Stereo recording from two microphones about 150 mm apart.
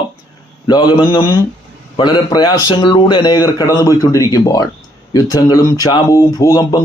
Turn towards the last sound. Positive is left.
turn(degrees=25)  # may be behind; listen again after turning